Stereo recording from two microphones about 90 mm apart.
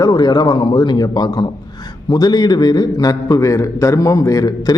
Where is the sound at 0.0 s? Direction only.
50° left (ahead or behind).